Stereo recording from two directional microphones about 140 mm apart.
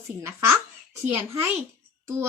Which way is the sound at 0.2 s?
20° right (ahead or behind).